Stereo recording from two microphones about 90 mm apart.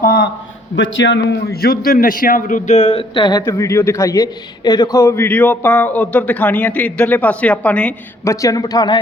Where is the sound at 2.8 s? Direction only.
75° left (ahead or behind); by 3.4 s 55° left (ahead or behind).